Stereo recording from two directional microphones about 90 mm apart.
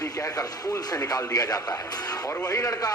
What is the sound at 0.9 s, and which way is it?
Speech, 40° left (ahead or behind).